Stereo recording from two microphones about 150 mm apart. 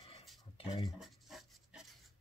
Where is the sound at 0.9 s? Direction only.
Centre (ahead or behind).